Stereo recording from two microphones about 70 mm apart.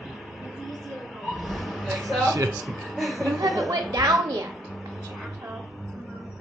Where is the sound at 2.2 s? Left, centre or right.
Right.